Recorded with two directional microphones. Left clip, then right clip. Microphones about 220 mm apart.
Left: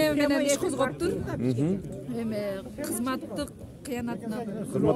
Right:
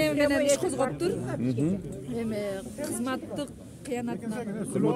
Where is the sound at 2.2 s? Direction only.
10° left (ahead or behind).